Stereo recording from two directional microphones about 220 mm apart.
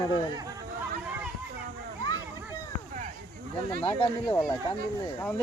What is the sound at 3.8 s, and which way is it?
Speech, 20° left (ahead or behind).